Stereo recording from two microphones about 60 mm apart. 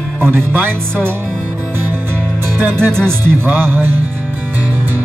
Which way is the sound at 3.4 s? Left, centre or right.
Right.